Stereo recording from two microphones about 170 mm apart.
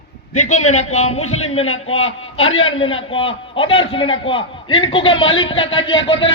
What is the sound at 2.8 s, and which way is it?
A man's voice, 35° left (ahead or behind).